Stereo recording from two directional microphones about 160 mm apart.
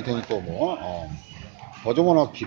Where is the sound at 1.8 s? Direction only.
30° right (ahead or behind).